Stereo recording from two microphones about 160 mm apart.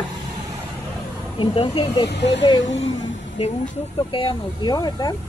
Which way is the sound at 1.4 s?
35° left (ahead or behind).